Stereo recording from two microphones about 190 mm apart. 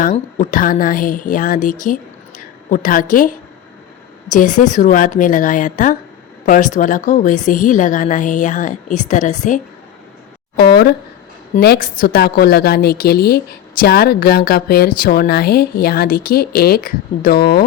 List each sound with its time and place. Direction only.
0.0 s a woman's voice: 45° left (ahead or behind)
11.6 s speech: 50° left (ahead or behind)